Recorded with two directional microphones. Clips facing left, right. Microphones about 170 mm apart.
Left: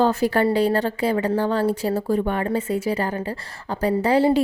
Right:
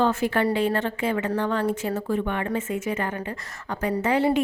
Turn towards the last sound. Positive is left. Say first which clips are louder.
# left 4 dB
turn(degrees=35)  # may be behind; listen again after turning